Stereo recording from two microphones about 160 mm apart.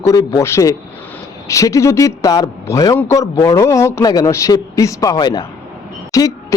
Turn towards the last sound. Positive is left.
turn(degrees=20)  # may be behind; listen again after turning